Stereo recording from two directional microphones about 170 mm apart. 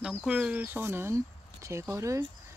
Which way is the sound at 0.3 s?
5° right (ahead or behind).